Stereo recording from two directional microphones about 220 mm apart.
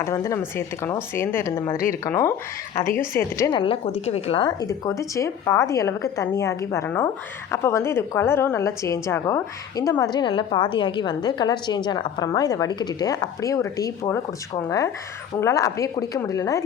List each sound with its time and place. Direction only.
0.0 s a woman's voice: 15° left (ahead or behind)